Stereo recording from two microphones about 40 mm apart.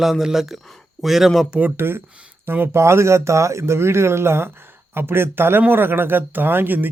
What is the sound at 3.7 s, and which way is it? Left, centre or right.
Speech, right.